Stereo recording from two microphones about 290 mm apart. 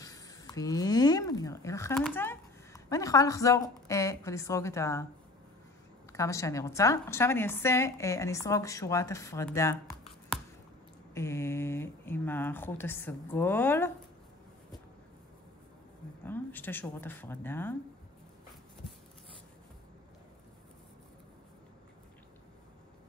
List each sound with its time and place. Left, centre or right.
0.0 s speech: centre
6.1 s a woman's voice: centre
10.3 s chewing: centre
11.1 s a woman's voice: centre
16.3 s a woman's voice: centre